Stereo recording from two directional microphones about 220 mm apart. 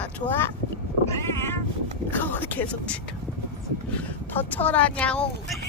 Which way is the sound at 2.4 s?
10° left (ahead or behind).